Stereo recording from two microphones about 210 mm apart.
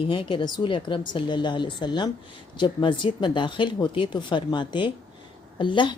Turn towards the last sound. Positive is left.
turn(degrees=20)  # may be behind; listen again after turning